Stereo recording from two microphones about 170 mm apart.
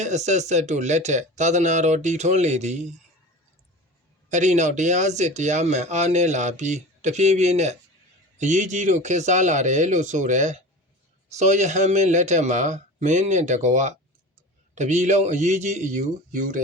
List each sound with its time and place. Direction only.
0.0 s speech: 45° right (ahead or behind)
4.3 s speech: 45° right (ahead or behind)